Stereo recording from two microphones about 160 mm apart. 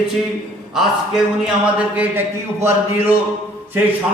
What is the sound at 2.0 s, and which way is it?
Speech, 15° right (ahead or behind).